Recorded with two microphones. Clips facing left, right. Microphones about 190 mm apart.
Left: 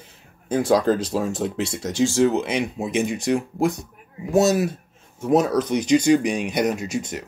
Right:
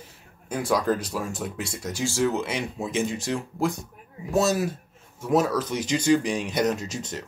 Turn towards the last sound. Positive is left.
turn(degrees=10)  # may be behind; listen again after turning